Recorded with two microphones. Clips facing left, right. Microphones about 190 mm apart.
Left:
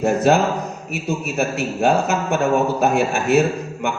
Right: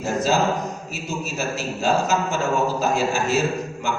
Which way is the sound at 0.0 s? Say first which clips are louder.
Left 5 dB; 60° left (ahead or behind).